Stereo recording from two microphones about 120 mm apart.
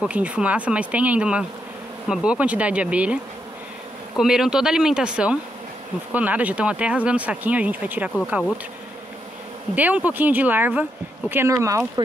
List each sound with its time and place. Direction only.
0.0 s speech: 10° right (ahead or behind)
4.2 s speech: 5° right (ahead or behind)
9.8 s speech: 15° right (ahead or behind)